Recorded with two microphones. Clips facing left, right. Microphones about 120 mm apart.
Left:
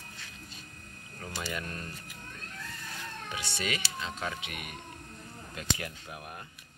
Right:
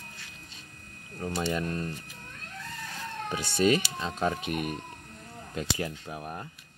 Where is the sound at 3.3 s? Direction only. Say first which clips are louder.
Right 12 dB; 45° right (ahead or behind).